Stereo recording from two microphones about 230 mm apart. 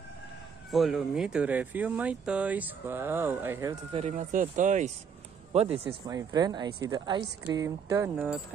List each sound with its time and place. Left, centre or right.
0.7 s speech: centre
3.9 s speech: right; by 8.4 s centre